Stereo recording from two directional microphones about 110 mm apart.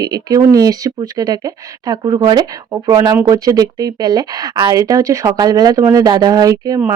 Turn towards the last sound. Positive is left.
turn(degrees=-30)  # may be behind; listen again after turning